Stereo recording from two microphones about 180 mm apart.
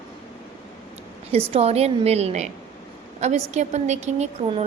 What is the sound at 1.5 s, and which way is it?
A woman's voice, 35° right (ahead or behind).